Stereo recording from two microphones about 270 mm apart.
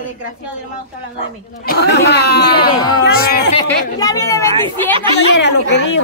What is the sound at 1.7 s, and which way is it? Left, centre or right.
Speech, left.